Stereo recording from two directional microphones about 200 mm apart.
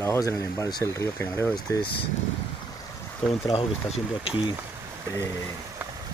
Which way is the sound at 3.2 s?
30° left (ahead or behind).